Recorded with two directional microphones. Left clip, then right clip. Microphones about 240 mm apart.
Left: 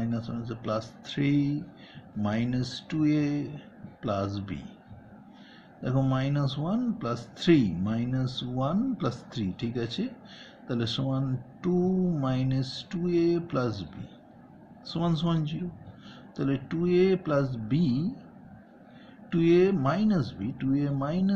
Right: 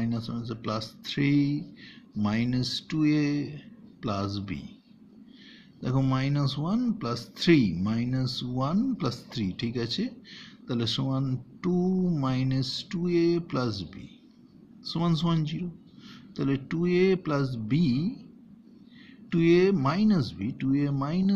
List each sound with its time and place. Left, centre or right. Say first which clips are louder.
0.0 s speech: right 1 dB; right
5.8 s speech: even; right
19.3 s speech: even; right